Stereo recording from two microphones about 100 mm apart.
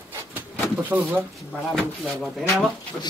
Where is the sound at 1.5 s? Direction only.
Centre (ahead or behind).